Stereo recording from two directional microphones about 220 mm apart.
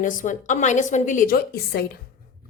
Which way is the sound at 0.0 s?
35° left (ahead or behind).